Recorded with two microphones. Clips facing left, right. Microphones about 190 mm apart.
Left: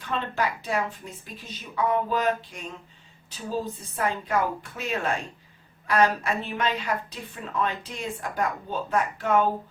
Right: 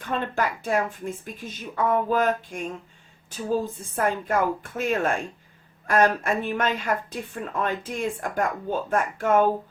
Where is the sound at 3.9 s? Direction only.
50° right (ahead or behind).